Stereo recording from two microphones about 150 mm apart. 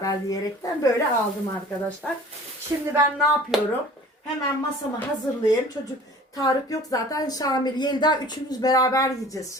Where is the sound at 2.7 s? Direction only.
20° right (ahead or behind).